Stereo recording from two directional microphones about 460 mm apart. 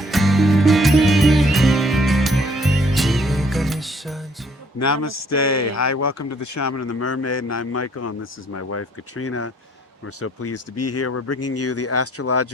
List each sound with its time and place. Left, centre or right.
0.0 s music: centre
4.8 s speech: left